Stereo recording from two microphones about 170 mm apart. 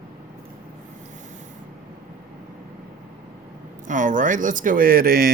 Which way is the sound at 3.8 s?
50° right (ahead or behind).